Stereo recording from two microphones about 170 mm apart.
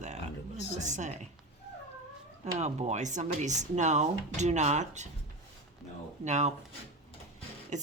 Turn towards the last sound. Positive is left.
turn(degrees=-45)  # may be behind; listen again after turning